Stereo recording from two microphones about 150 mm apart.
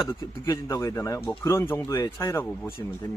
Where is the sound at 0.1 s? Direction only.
20° left (ahead or behind).